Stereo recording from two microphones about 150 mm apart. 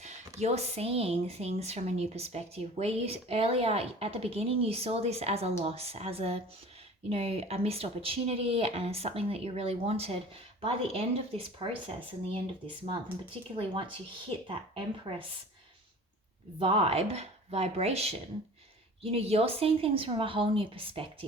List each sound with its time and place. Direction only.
0.3 s a woman's voice: 45° right (ahead or behind)
16.6 s a woman's voice: 35° right (ahead or behind)